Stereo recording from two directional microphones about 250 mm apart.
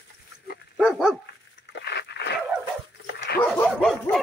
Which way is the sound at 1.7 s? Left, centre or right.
Left.